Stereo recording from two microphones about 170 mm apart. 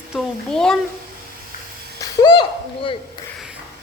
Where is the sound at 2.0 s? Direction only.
25° left (ahead or behind).